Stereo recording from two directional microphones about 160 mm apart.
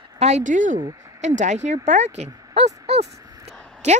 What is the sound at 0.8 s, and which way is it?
Speech, 20° right (ahead or behind).